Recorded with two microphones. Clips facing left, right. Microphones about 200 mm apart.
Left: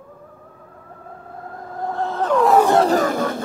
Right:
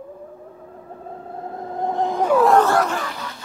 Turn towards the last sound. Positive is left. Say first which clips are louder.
# left 10 dB
turn(degrees=50)  # may be behind; listen again after turning